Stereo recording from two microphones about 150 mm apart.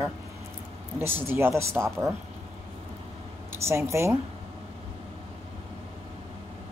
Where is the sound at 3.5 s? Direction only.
15° right (ahead or behind).